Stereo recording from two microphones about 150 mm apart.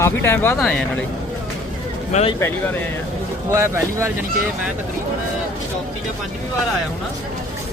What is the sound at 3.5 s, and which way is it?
Speech, 15° right (ahead or behind).